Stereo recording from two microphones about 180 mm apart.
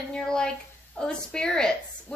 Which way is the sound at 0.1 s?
5° left (ahead or behind).